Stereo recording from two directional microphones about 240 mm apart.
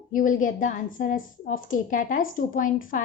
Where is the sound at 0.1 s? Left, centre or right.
Left.